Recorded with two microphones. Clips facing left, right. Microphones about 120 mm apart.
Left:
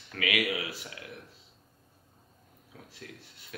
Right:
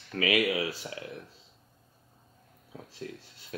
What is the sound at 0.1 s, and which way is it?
Speech, 30° right (ahead or behind).